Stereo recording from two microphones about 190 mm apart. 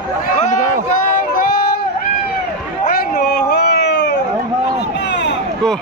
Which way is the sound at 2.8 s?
50° left (ahead or behind).